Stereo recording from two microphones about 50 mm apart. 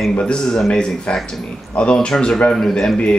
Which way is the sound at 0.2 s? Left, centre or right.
Centre.